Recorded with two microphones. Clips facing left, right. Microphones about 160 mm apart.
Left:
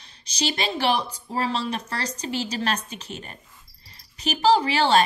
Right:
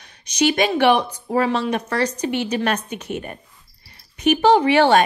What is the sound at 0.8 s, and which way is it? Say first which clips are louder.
A woman's voice: right 7 dB; 30° left (ahead or behind).